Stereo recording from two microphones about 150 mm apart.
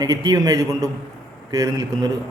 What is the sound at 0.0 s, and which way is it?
A man's voice, 25° right (ahead or behind).